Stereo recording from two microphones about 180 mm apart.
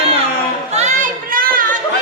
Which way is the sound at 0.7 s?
40° right (ahead or behind).